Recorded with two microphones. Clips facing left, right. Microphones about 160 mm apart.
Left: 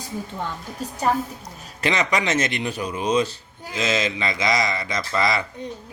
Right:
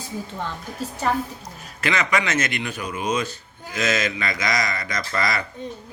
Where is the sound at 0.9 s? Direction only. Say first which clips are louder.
Left 2 dB; 35° left (ahead or behind).